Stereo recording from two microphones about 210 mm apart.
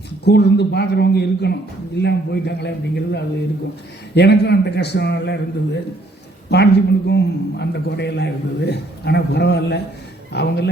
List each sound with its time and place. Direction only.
0.3 s a man's voice: 55° left (ahead or behind)
6.5 s a man's voice: 50° left (ahead or behind)